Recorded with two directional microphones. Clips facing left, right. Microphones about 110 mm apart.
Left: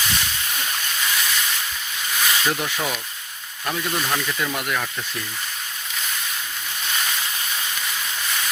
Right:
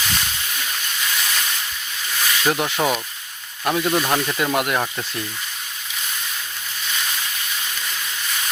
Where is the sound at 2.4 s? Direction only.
40° right (ahead or behind).